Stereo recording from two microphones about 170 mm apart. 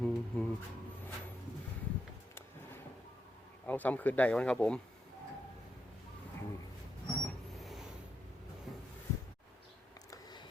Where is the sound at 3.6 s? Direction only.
10° left (ahead or behind).